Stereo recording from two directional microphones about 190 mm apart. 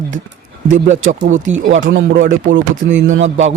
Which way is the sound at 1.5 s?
90° right.